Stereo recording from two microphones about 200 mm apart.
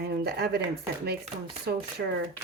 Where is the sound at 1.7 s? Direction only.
50° right (ahead or behind).